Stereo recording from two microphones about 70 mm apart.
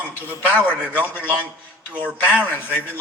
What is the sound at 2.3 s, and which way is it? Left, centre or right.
Speech, right.